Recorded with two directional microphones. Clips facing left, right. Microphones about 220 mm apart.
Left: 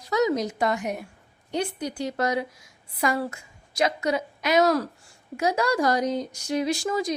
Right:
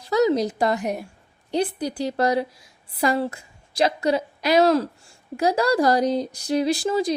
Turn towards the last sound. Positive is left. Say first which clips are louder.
# right 4 dB
turn(degrees=-30)  # may be behind; listen again after turning